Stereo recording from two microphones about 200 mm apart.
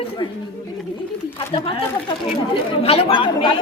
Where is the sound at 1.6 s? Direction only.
25° left (ahead or behind).